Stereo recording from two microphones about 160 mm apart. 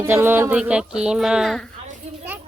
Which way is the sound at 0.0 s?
15° right (ahead or behind).